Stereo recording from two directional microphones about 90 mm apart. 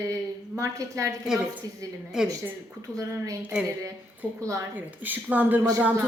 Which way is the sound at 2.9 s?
35° right (ahead or behind).